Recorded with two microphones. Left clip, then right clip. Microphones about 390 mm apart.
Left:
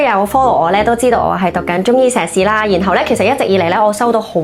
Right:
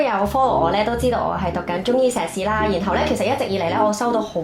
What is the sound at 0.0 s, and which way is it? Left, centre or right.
A woman's voice, left.